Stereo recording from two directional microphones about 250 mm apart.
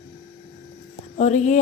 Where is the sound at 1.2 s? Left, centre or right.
Left.